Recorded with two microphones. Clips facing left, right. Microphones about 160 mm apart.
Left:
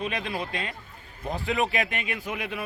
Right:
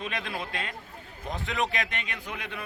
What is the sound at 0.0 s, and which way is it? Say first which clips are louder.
Speech: left 4 dB; centre (ahead or behind).